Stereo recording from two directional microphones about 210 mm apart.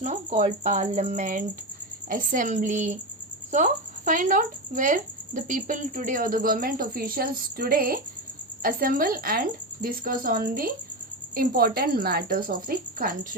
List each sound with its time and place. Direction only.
0.0 s a woman's voice: 30° right (ahead or behind)